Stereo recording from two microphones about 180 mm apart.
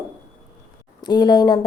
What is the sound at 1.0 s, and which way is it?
Speech, 25° left (ahead or behind).